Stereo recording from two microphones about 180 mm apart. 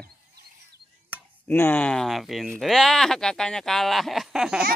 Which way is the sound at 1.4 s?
10° left (ahead or behind).